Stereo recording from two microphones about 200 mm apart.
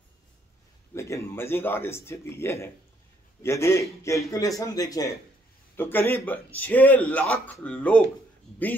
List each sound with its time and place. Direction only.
0.9 s speech: 15° left (ahead or behind)